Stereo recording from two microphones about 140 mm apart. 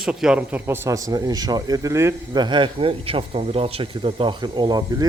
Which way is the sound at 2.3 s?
35° right (ahead or behind).